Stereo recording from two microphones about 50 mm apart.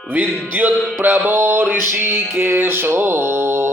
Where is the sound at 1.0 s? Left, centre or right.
Right.